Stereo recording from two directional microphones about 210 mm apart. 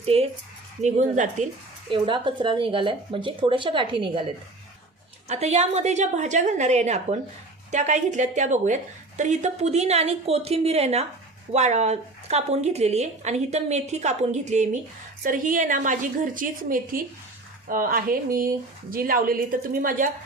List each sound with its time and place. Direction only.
0.0 s a woman's voice: 30° right (ahead or behind)
1.9 s speech: 25° right (ahead or behind)
5.3 s a woman's voice: 30° right (ahead or behind)